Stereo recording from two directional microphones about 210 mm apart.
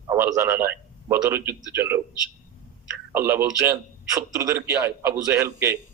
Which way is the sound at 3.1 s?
10° right (ahead or behind).